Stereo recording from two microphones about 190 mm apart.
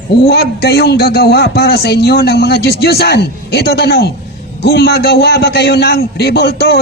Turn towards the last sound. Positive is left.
turn(degrees=60)  # may be behind; listen again after turning